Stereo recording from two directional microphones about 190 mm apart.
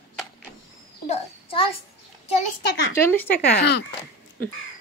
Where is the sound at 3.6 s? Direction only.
65° left (ahead or behind).